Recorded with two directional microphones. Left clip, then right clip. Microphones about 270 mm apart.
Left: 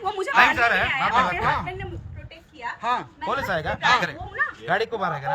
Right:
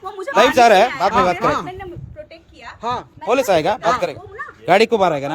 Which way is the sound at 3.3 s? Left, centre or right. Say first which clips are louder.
Right 10 dB; right.